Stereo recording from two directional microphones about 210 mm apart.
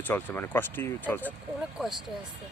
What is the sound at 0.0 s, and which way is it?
Speech, 10° left (ahead or behind).